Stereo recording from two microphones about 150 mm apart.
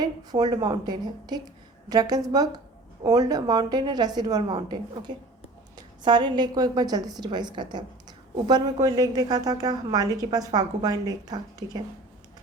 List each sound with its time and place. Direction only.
0.0 s a woman's voice: 25° right (ahead or behind)